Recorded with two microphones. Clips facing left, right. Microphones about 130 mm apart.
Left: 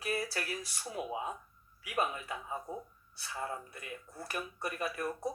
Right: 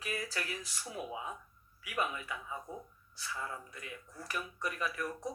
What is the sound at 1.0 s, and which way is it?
Speech, 20° left (ahead or behind).